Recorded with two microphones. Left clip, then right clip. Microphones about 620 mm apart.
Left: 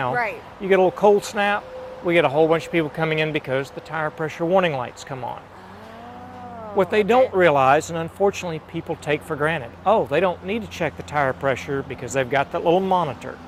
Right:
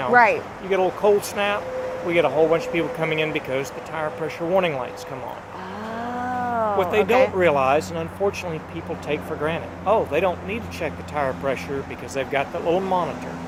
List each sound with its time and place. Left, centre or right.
0.1 s speech: centre
0.7 s speech: left
6.7 s speech: left